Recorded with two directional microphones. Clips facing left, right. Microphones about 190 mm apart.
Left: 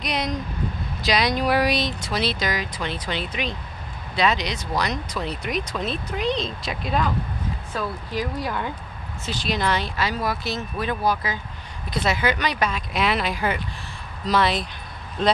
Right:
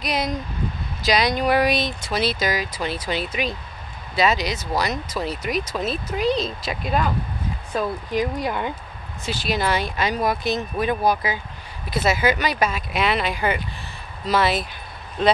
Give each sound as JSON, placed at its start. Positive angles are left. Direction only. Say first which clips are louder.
{"t": 0.0, "sound": "speech", "louder": "right 1 dB", "side_deg": -5}
{"t": 7.7, "sound": "speech", "louder": "right 5 dB", "side_deg": -15}
{"t": 9.2, "sound": "speech", "louder": "right 1 dB", "side_deg": -5}